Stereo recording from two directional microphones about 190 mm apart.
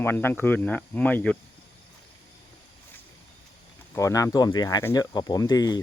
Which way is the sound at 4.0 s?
15° left (ahead or behind).